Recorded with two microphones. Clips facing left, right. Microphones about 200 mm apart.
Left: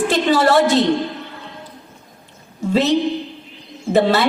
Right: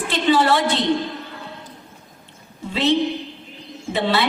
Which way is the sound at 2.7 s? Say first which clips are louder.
Left 3 dB; 45° left (ahead or behind).